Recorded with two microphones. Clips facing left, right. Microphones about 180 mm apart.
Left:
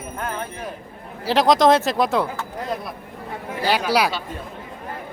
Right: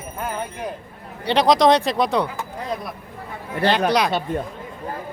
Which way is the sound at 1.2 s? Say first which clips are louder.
Even; centre (ahead or behind).